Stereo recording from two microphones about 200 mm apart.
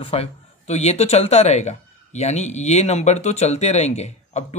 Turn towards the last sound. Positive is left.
turn(degrees=35)  # may be behind; listen again after turning